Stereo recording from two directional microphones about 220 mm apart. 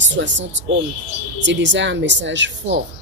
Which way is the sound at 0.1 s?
55° right (ahead or behind).